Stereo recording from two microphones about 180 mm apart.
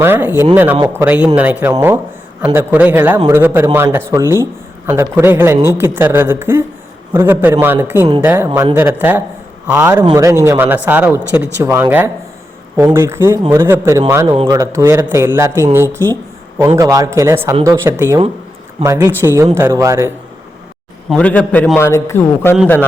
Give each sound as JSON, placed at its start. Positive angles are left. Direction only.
{"t": 0.0, "sound": "speech", "side_deg": -10}
{"t": 10.0, "sound": "speech", "side_deg": -20}
{"t": 21.1, "sound": "a man's voice", "side_deg": 5}